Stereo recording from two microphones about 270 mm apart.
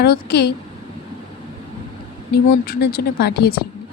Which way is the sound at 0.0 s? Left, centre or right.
Left.